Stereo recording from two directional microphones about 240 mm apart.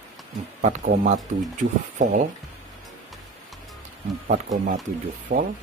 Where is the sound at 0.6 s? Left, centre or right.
Right.